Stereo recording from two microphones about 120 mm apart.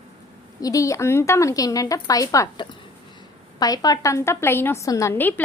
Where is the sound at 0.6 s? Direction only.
30° left (ahead or behind).